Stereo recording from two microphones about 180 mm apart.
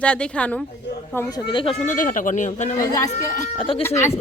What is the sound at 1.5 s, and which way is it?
Speech, 30° left (ahead or behind).